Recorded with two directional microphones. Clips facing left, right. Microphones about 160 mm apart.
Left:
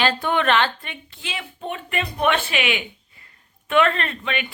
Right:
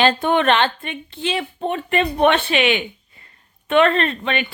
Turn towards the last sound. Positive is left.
turn(degrees=-30)  # may be behind; listen again after turning